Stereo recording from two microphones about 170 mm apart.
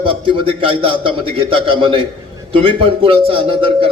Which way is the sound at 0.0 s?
30° right (ahead or behind).